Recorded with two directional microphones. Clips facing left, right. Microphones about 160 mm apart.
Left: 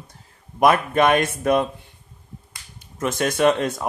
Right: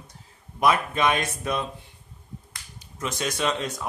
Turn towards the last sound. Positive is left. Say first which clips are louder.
# left 9 dB
turn(degrees=55)  # may be behind; listen again after turning